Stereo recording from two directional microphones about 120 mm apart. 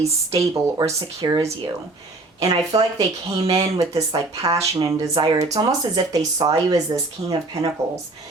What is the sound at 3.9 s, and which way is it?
Speech, 30° right (ahead or behind).